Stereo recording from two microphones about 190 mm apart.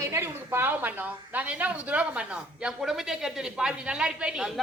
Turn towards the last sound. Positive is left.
turn(degrees=-5)  # may be behind; listen again after turning